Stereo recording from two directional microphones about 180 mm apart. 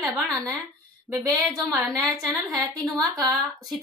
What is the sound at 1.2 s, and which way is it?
Speech, 20° right (ahead or behind).